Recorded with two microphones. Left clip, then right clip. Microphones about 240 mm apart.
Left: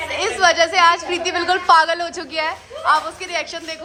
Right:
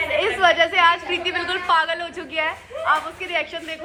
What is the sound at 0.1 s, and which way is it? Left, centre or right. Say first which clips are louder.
A woman's voice: left 2 dB; centre.